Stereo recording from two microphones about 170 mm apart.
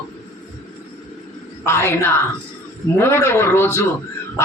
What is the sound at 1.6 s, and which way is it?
Speech, 15° left (ahead or behind).